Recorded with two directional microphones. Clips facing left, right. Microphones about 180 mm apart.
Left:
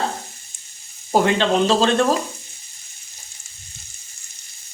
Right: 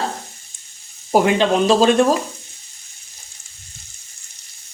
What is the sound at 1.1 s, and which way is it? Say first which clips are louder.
Speech: right 2 dB; 10° right (ahead or behind).